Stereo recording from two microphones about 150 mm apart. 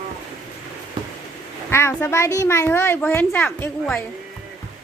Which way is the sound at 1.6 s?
15° left (ahead or behind).